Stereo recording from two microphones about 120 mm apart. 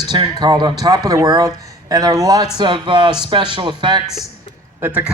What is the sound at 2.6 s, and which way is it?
Speech, 40° right (ahead or behind).